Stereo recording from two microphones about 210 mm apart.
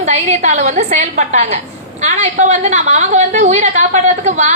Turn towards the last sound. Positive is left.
turn(degrees=-35)  # may be behind; listen again after turning